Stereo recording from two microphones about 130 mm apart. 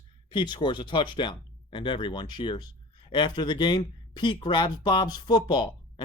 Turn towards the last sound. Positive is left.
turn(degrees=40)  # may be behind; listen again after turning